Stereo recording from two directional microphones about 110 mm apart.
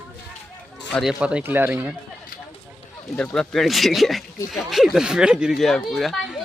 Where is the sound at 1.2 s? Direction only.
10° right (ahead or behind).